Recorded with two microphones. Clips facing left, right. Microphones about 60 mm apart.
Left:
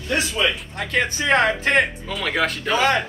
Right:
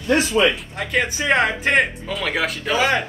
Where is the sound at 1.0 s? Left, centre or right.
Centre.